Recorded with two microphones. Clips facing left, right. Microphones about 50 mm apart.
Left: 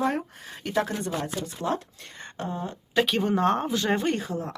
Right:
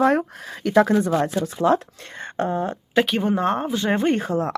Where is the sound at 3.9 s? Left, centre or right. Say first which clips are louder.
Right 6 dB; right.